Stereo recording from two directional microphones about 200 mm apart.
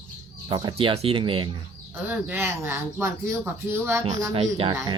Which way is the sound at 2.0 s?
10° right (ahead or behind).